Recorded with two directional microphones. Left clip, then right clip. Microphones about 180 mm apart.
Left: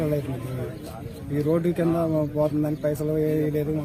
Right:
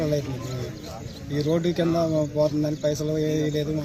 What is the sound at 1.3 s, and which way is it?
Speech, centre (ahead or behind).